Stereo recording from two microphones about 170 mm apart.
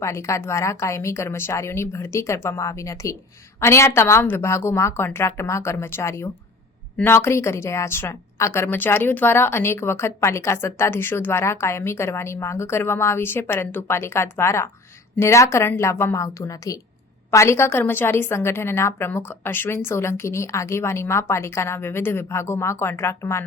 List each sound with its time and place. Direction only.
0.0 s a woman's voice: 15° left (ahead or behind)